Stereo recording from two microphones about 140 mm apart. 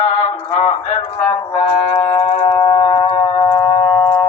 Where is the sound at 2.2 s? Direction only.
55° left (ahead or behind).